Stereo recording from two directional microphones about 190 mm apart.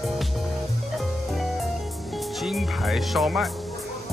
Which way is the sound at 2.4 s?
Centre (ahead or behind).